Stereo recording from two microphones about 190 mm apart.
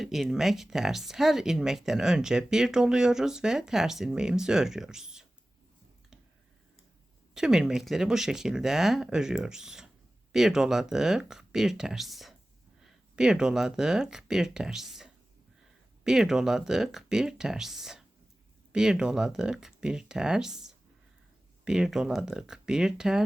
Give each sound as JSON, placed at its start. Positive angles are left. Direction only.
{"t": 0.0, "sound": "speech", "side_deg": 0}
{"t": 7.3, "sound": "speech", "side_deg": -5}